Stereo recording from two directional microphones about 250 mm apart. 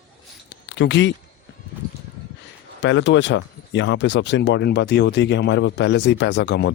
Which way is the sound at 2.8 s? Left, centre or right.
Left.